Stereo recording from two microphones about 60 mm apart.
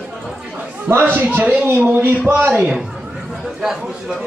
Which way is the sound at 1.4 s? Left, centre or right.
Right.